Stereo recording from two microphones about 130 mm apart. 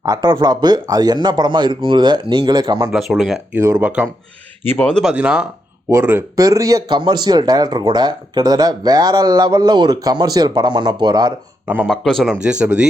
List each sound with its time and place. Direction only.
0.0 s speech: 30° right (ahead or behind)
2.9 s speech: centre (ahead or behind)
3.5 s speech: 15° right (ahead or behind)
4.6 s speech: 15° left (ahead or behind)
5.1 s speech: 10° right (ahead or behind); by 11.3 s 35° right (ahead or behind)
11.9 s speech: centre (ahead or behind)